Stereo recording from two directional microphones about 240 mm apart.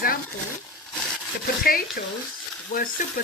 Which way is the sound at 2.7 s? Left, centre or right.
Left.